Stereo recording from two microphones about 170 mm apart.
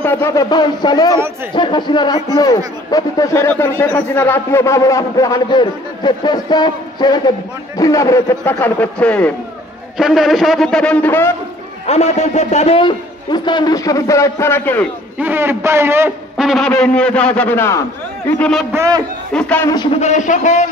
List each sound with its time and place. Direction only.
0.0 s a man's voice: 15° left (ahead or behind)
11.9 s speech: 40° left (ahead or behind); by 14.9 s 10° left (ahead or behind)
15.1 s a man's voice: 10° right (ahead or behind)
16.3 s a man's voice: centre (ahead or behind)
18.4 s a man's voice: centre (ahead or behind)
18.7 s a man's voice: 20° right (ahead or behind)
19.3 s a man's voice: 5° left (ahead or behind)
19.9 s a man's voice: 40° left (ahead or behind)